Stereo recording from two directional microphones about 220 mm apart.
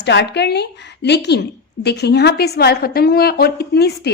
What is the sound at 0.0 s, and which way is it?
A woman's voice, 50° left (ahead or behind).